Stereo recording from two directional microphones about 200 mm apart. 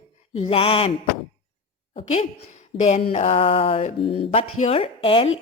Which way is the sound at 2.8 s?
30° left (ahead or behind).